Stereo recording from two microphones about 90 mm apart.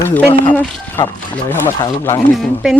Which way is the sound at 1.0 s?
55° left (ahead or behind).